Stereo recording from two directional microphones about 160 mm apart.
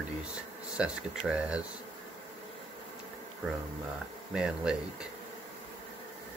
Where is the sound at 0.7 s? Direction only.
5° right (ahead or behind).